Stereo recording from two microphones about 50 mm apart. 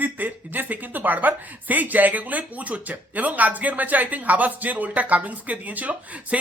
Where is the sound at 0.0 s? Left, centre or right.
Right.